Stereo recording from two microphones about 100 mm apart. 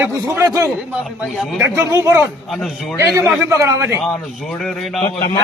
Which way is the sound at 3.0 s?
30° right (ahead or behind).